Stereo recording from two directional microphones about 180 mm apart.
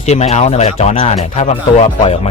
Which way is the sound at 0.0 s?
35° left (ahead or behind).